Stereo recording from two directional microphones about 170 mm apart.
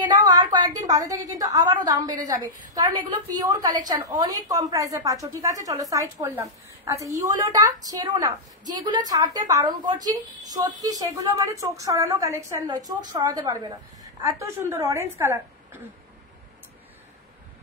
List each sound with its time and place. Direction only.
0.0 s a woman's voice: 25° right (ahead or behind)